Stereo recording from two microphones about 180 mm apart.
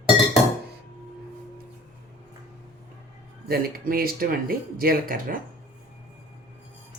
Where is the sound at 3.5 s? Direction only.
55° right (ahead or behind).